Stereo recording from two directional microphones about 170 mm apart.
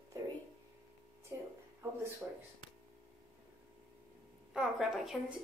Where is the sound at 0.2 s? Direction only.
20° right (ahead or behind).